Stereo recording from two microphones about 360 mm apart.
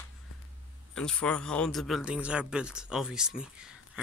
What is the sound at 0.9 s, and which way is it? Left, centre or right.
Speech, centre.